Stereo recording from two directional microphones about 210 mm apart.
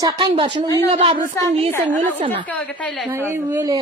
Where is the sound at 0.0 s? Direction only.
20° right (ahead or behind).